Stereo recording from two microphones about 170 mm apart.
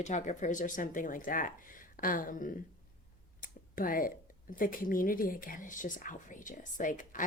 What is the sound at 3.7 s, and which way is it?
Speech, 55° left (ahead or behind).